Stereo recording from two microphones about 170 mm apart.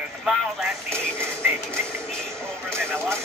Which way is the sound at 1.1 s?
15° right (ahead or behind).